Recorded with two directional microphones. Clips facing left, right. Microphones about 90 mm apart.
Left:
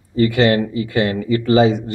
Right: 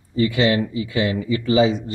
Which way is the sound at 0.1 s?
55° left (ahead or behind).